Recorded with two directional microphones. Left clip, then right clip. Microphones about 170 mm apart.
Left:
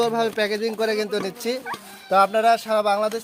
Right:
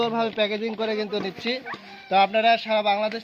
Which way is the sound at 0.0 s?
60° left (ahead or behind).